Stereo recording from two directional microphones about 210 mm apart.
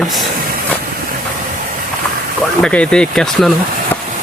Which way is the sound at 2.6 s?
5° left (ahead or behind).